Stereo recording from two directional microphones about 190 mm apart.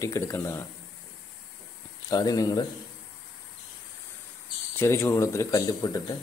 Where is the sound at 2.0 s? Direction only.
20° left (ahead or behind).